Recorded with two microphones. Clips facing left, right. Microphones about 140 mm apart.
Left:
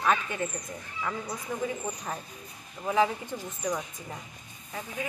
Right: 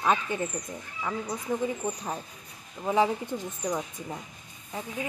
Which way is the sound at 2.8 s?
20° right (ahead or behind).